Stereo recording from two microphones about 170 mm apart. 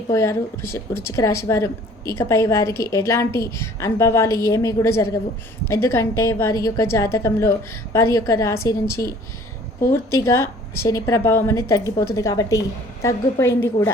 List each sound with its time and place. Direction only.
0.1 s a woman's voice: 15° left (ahead or behind)